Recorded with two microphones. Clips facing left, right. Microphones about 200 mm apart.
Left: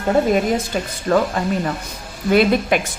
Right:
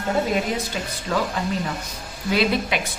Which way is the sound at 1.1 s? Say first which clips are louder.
Left 8 dB; 50° left (ahead or behind).